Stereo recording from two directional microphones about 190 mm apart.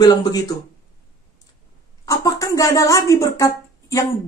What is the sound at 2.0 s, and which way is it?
Speech, 15° left (ahead or behind).